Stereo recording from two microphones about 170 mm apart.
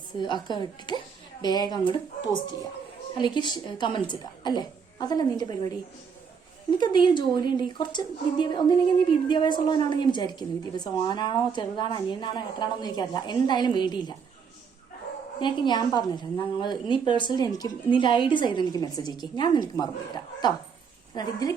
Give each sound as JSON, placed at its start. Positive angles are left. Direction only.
{"t": 0.4, "sound": "a woman's voice", "side_deg": 25}
{"t": 15.4, "sound": "a woman's voice", "side_deg": 30}